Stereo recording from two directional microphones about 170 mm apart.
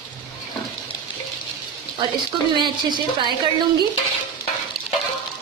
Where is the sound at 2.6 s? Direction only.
25° right (ahead or behind).